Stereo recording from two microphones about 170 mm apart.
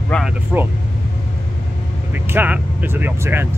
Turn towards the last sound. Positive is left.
turn(degrees=-15)  # may be behind; listen again after turning